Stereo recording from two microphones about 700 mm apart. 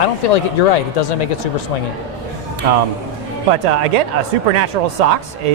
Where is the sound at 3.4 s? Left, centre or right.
Right.